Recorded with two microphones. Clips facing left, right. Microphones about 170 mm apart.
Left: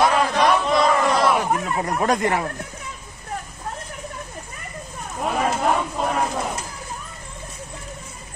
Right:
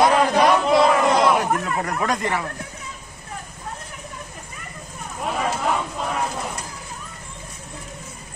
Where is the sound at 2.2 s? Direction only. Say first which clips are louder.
Left 3 dB; 45° left (ahead or behind).